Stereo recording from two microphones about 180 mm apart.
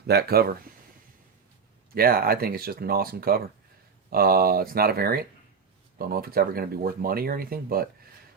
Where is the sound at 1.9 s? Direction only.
55° right (ahead or behind).